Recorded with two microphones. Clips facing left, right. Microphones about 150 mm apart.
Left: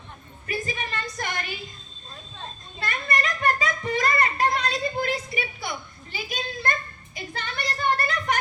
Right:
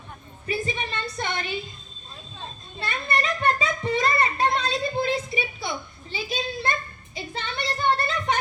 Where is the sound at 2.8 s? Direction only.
25° right (ahead or behind).